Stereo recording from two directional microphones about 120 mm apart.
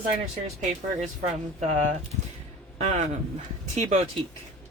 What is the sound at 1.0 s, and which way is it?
Speech, 70° right (ahead or behind).